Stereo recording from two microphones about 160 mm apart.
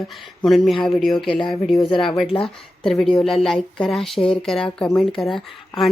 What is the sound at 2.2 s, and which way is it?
Speech, 35° left (ahead or behind).